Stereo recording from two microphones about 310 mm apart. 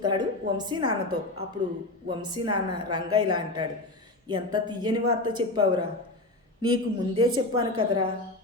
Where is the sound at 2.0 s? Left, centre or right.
Centre.